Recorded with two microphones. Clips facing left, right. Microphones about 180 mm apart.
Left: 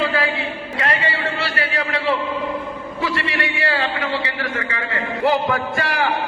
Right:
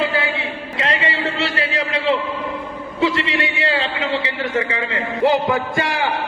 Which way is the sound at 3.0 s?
20° right (ahead or behind).